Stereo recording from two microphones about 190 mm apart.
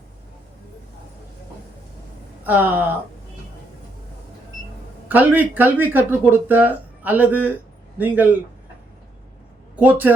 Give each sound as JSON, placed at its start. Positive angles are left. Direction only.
{"t": 2.4, "sound": "speech", "side_deg": -10}
{"t": 5.0, "sound": "speech", "side_deg": -10}
{"t": 9.7, "sound": "speech", "side_deg": -10}